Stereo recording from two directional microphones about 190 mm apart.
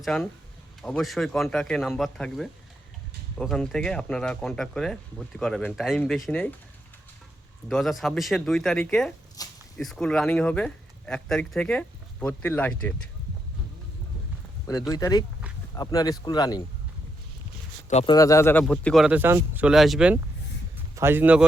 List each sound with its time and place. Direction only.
0.0 s speech: 5° left (ahead or behind)
7.7 s speech: centre (ahead or behind)
9.4 s a sound: 20° left (ahead or behind)
9.7 s speech: 5° left (ahead or behind)
14.7 s speech: 20° left (ahead or behind)
17.8 s speech: 35° left (ahead or behind)
18.1 s speech: 20° left (ahead or behind); by 20.1 s 5° right (ahead or behind)
20.7 s a sound: 10° right (ahead or behind)